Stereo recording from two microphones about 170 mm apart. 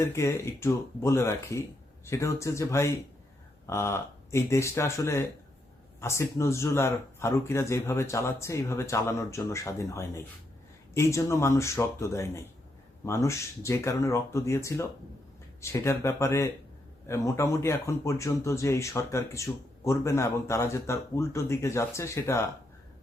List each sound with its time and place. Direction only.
0.0 s speech: 15° left (ahead or behind)